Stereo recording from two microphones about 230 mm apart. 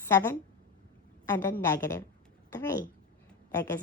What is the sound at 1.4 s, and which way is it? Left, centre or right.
A child's voice, centre.